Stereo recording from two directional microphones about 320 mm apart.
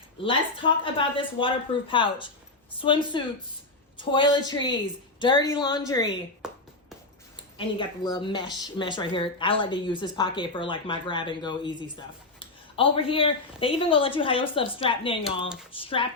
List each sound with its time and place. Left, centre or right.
0.2 s speech: centre
6.4 s a sound: centre
7.8 s speech: centre